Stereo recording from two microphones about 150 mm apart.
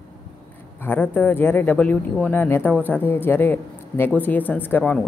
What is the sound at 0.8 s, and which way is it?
A woman's voice, 10° left (ahead or behind).